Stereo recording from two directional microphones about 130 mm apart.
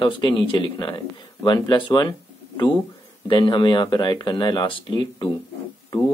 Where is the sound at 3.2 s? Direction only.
40° left (ahead or behind).